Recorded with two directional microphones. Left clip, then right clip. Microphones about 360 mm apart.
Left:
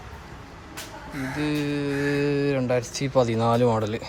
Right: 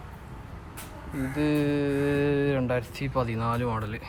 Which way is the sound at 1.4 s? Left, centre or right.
Centre.